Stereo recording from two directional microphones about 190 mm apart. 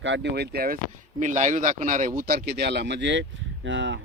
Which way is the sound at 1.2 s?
40° right (ahead or behind).